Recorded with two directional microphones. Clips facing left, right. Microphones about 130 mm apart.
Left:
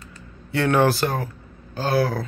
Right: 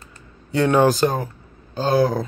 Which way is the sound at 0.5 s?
15° right (ahead or behind).